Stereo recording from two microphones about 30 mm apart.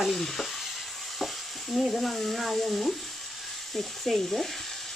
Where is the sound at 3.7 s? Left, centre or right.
Centre.